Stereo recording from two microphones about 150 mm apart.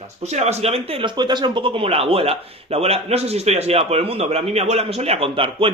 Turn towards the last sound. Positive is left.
turn(degrees=-35)  # may be behind; listen again after turning